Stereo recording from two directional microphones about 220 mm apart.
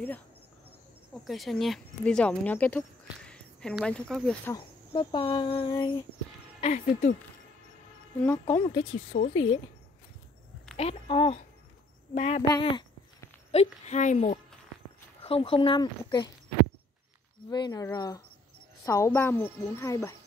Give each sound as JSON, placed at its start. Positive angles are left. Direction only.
{"t": 1.1, "sound": "speech", "side_deg": 0}
{"t": 4.9, "sound": "speech", "side_deg": 25}
{"t": 8.2, "sound": "a woman's voice", "side_deg": 10}
{"t": 9.1, "sound": "speech", "side_deg": 35}
{"t": 10.8, "sound": "speech", "side_deg": 25}
{"t": 12.4, "sound": "a sound", "side_deg": 15}
{"t": 13.5, "sound": "speech", "side_deg": 30}
{"t": 17.5, "sound": "a woman's voice", "side_deg": 20}